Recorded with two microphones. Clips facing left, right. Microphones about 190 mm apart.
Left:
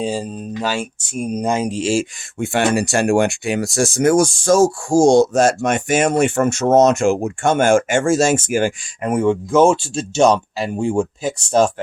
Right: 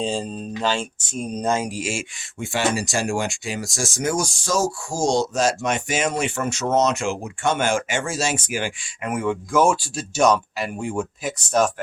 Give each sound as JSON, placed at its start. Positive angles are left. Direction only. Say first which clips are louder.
{"t": 0.0, "sound": "speech", "louder": "left 3 dB", "side_deg": 10}
{"t": 1.8, "sound": "speech", "louder": "left 10 dB", "side_deg": 35}
{"t": 2.4, "sound": "speech", "louder": "left 6 dB", "side_deg": 60}
{"t": 9.0, "sound": "speech", "louder": "left 7 dB", "side_deg": 30}